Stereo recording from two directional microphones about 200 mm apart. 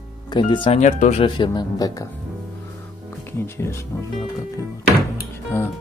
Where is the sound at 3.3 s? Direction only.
10° left (ahead or behind).